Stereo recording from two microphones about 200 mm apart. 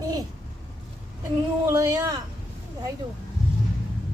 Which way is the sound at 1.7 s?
15° right (ahead or behind).